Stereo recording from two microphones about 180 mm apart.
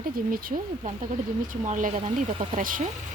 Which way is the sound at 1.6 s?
40° right (ahead or behind).